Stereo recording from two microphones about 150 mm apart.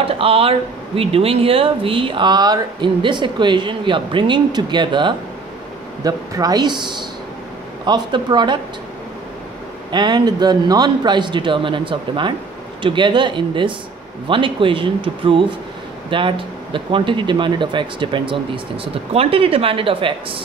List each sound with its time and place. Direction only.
0.0 s a man's voice: 40° right (ahead or behind)
9.8 s speech: 30° right (ahead or behind)